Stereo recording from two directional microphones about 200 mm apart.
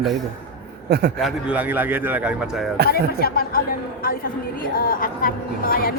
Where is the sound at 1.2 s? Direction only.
5° right (ahead or behind).